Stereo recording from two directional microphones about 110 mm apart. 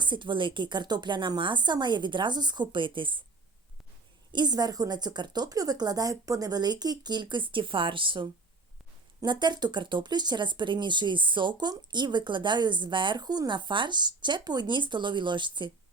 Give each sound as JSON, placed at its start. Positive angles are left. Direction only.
{"t": 0.0, "sound": "speech", "side_deg": -45}
{"t": 4.3, "sound": "a woman's voice", "side_deg": -40}